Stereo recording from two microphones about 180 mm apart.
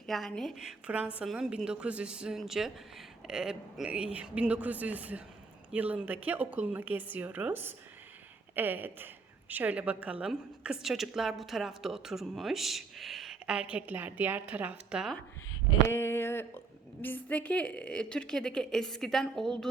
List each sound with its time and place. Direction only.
0.0 s a woman's voice: centre (ahead or behind)
15.9 s a woman's voice: 10° left (ahead or behind)